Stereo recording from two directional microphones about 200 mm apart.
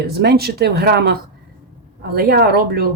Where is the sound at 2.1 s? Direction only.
50° right (ahead or behind).